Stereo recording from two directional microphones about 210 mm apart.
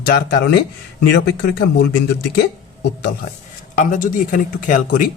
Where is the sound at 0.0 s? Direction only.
50° left (ahead or behind).